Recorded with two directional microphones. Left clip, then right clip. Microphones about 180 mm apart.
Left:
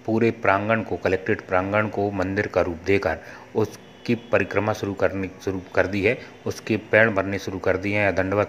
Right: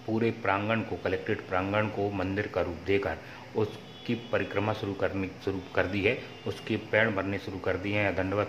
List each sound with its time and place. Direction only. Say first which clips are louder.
0.1 s speech: left 8 dB; 30° left (ahead or behind)